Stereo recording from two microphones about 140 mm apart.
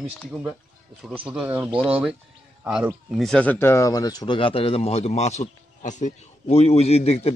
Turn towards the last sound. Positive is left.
turn(degrees=45)  # may be behind; listen again after turning